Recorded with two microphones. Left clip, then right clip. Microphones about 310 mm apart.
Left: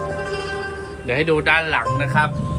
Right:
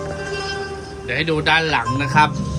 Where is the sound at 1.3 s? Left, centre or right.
Centre.